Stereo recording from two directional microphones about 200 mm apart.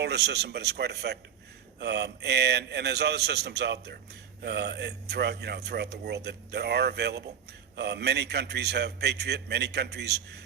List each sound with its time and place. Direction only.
0.0 s speech: 55° right (ahead or behind)